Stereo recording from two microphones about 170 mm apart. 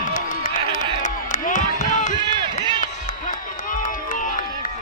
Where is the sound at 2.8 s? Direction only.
50° left (ahead or behind).